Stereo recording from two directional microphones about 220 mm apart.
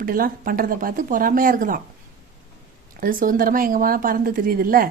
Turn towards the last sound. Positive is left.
turn(degrees=-40)  # may be behind; listen again after turning